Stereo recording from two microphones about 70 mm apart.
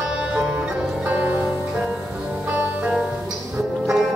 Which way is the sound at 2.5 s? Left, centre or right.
Right.